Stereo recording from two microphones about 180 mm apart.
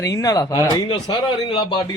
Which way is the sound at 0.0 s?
20° left (ahead or behind).